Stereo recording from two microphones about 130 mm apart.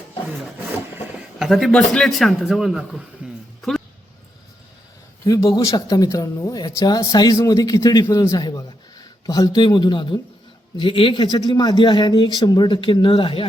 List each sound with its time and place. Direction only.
1.4 s a man's voice: centre (ahead or behind)
3.6 s a sound: centre (ahead or behind)
5.2 s a man's voice: 25° left (ahead or behind); by 13.5 s 40° left (ahead or behind)